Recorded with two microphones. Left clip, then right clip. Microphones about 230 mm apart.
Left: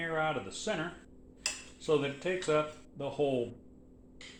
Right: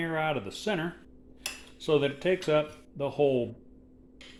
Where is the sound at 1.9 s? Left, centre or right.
Right.